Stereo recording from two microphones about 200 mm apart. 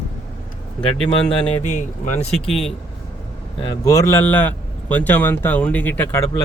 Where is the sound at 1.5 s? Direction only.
35° left (ahead or behind).